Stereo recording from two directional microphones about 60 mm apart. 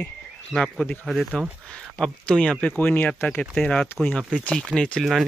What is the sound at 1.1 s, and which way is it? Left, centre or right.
Speech, centre.